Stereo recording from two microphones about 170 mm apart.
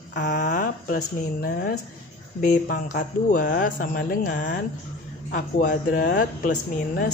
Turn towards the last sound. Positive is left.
turn(degrees=55)  # may be behind; listen again after turning